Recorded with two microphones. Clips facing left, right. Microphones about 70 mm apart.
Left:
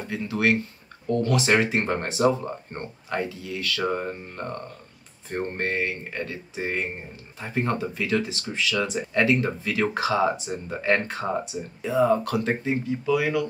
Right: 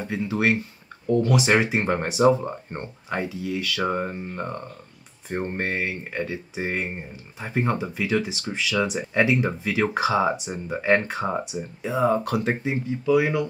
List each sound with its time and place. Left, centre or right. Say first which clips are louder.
0.0 s speech: right 1 dB; right